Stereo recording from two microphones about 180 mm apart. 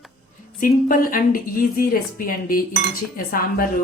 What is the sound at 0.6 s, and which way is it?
A woman's voice, 50° left (ahead or behind).